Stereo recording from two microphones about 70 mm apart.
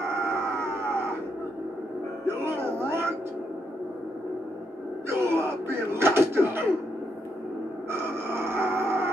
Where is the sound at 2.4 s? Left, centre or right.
Right.